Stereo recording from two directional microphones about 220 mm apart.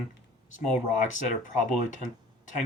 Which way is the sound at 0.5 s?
35° left (ahead or behind).